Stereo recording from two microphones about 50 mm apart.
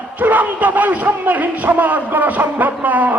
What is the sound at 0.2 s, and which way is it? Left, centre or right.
A man's voice, right.